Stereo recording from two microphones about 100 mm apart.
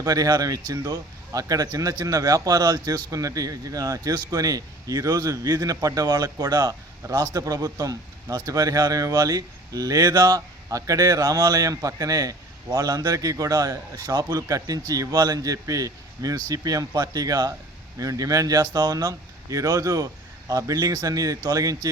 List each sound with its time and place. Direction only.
0.0 s speech: 35° right (ahead or behind)